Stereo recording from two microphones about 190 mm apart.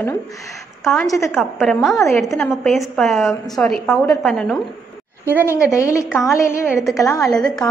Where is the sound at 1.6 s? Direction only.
5° left (ahead or behind).